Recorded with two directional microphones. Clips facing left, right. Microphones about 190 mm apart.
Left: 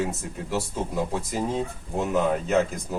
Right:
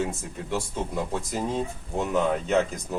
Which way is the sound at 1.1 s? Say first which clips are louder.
Left 1 dB; 10° left (ahead or behind).